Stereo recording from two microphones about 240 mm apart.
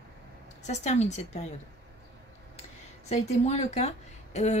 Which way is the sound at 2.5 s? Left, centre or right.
Left.